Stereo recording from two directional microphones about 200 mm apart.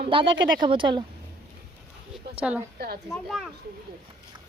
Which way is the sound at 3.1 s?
Centre (ahead or behind).